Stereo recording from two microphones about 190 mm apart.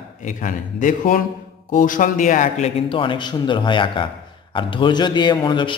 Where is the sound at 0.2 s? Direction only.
40° left (ahead or behind).